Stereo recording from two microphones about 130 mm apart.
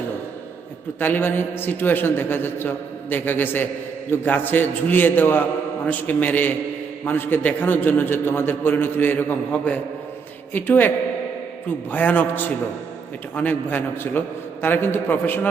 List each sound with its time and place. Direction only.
0.9 s a man's voice: 15° left (ahead or behind)